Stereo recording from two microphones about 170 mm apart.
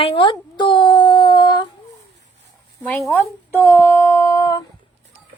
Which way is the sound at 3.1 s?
15° left (ahead or behind).